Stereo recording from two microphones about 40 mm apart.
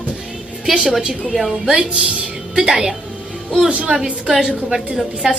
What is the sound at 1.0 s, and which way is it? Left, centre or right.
A woman's voice, right.